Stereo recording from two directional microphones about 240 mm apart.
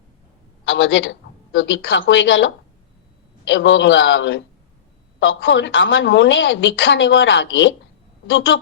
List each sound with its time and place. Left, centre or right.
0.6 s a woman's voice: left